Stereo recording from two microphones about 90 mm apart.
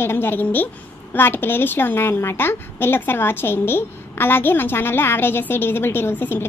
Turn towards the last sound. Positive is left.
turn(degrees=25)  # may be behind; listen again after turning